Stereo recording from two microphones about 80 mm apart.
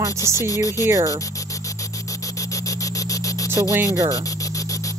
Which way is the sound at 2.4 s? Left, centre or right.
Left.